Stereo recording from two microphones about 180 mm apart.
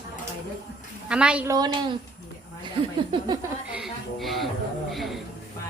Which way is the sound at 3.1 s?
25° right (ahead or behind).